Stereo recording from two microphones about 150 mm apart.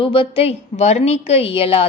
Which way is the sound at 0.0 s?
35° left (ahead or behind).